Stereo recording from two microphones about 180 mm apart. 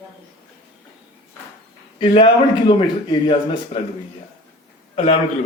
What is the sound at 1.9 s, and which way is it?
Speech, 30° left (ahead or behind).